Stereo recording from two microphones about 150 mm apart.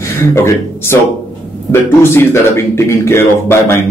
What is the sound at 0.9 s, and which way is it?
Speech, 15° left (ahead or behind).